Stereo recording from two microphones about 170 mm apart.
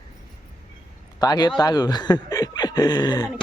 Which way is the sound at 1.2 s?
25° left (ahead or behind).